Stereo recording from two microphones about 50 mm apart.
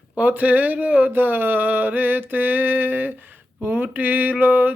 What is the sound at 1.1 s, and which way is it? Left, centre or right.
Mantra, right.